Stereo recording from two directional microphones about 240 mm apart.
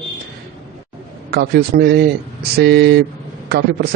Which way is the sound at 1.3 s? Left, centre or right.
Right.